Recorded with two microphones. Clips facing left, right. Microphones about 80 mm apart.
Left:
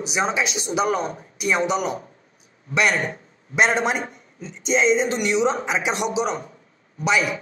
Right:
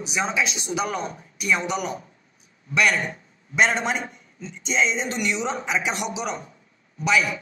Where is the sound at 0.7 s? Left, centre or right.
Left.